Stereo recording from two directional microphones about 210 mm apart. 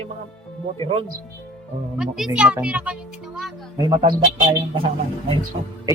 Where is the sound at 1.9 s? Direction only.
Centre (ahead or behind).